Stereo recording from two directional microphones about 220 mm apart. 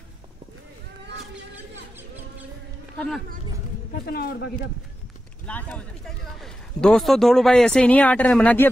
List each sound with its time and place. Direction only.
4.0 s a man's voice: 45° left (ahead or behind)
5.5 s speech: 5° left (ahead or behind)